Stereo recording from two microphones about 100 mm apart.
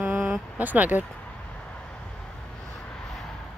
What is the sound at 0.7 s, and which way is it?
Speech, 15° right (ahead or behind).